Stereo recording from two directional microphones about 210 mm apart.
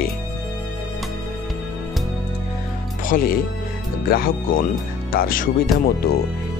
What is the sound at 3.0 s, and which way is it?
Speech, 40° left (ahead or behind).